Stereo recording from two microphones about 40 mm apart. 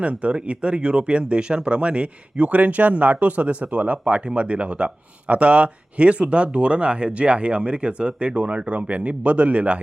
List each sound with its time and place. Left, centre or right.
0.0 s speech: right